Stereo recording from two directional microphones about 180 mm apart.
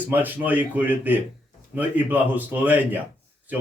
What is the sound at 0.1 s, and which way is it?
Speech, 10° right (ahead or behind).